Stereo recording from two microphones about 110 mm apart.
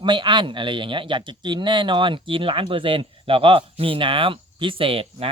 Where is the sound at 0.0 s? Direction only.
45° right (ahead or behind).